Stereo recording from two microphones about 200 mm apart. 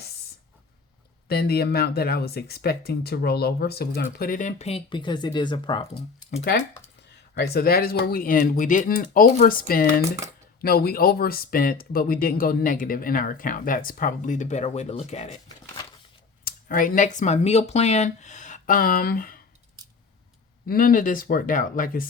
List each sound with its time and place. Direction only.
1.3 s speech: 50° left (ahead or behind); by 5.9 s 25° left (ahead or behind)
7.3 s speech: 50° left (ahead or behind); by 15.8 s 35° left (ahead or behind)
16.4 s speech: 45° left (ahead or behind)
20.7 s speech: 45° left (ahead or behind)